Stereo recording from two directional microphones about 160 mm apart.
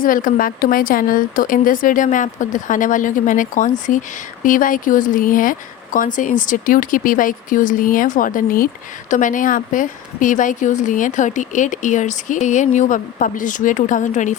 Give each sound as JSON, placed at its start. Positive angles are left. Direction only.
{"t": 0.0, "sound": "speech", "side_deg": 60}